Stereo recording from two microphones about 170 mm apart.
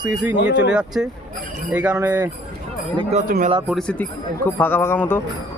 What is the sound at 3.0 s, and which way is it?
Speech, 40° right (ahead or behind).